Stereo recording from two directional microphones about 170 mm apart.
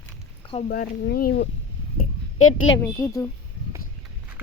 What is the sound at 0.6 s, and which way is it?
Speech, 65° left (ahead or behind).